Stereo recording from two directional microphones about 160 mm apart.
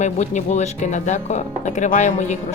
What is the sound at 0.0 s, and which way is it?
Speech, 45° left (ahead or behind).